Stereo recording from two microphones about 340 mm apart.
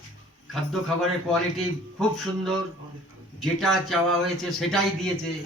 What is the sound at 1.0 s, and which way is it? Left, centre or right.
A man's voice, centre.